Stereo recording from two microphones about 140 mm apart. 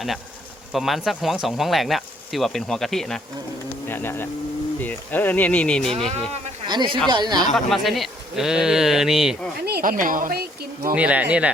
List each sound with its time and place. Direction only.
0.7 s speech: centre (ahead or behind)
3.8 s speech: 15° left (ahead or behind)
6.7 s speech: 35° right (ahead or behind)
7.5 s speech: centre (ahead or behind)
9.8 s speech: 80° right
10.9 s speech: 10° right (ahead or behind)